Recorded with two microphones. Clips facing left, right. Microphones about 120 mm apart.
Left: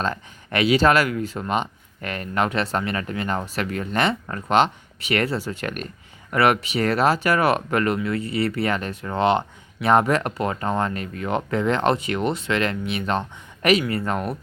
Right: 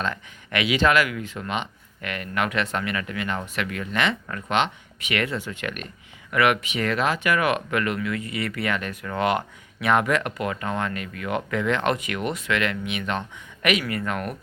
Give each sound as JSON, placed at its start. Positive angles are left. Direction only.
{"t": 0.0, "sound": "speech", "side_deg": 35}